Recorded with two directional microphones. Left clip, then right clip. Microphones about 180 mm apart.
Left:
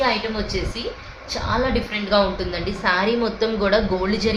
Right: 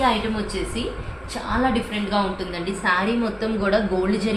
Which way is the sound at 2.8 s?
40° left (ahead or behind).